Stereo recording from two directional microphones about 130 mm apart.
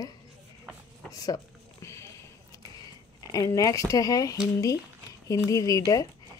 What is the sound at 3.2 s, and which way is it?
Speech, 25° left (ahead or behind).